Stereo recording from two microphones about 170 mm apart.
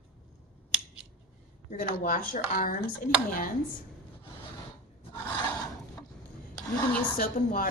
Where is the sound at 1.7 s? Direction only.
55° left (ahead or behind).